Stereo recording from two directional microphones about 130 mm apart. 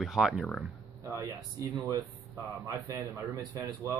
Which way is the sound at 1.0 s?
25° right (ahead or behind).